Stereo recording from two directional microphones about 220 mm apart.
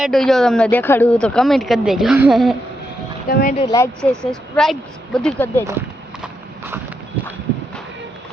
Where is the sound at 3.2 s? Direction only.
45° left (ahead or behind).